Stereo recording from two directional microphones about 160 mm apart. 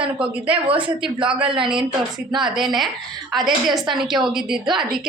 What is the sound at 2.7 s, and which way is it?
A woman's voice, centre (ahead or behind).